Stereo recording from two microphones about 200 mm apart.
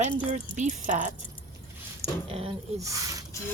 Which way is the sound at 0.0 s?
35° right (ahead or behind).